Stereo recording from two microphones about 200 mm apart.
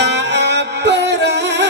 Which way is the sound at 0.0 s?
60° right (ahead or behind).